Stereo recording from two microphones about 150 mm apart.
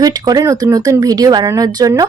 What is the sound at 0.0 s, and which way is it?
Speech, 25° right (ahead or behind).